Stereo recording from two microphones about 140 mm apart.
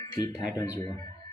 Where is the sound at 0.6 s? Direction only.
25° left (ahead or behind).